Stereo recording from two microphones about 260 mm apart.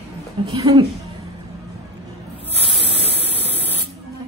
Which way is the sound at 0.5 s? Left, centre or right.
Centre.